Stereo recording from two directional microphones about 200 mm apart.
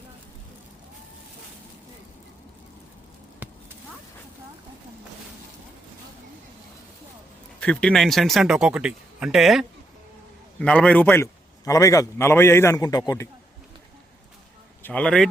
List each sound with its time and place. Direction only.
3.4 s clip-clop: 10° right (ahead or behind)
7.6 s a man's voice: 5° left (ahead or behind)
14.8 s speech: 5° left (ahead or behind)